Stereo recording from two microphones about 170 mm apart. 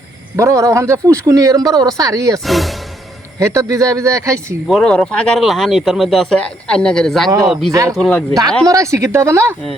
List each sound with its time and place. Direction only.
0.3 s speech: 20° right (ahead or behind)
2.4 s speech: centre (ahead or behind)
3.3 s speech: 20° right (ahead or behind)
4.7 s speech: 5° left (ahead or behind)
7.7 s speech: 20° right (ahead or behind)
7.9 s speech: 5° left (ahead or behind)
8.6 s speech: 20° right (ahead or behind)